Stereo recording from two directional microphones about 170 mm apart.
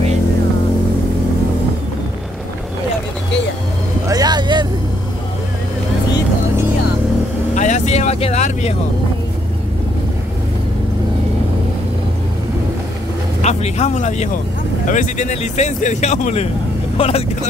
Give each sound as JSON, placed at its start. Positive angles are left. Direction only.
{"t": 4.1, "sound": "vehicle", "side_deg": -25}
{"t": 7.5, "sound": "vehicle", "side_deg": 45}
{"t": 13.4, "sound": "speech", "side_deg": 40}